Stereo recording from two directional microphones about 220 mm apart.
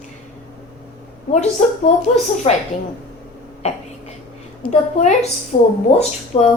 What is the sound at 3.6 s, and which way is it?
A woman's voice, 30° left (ahead or behind).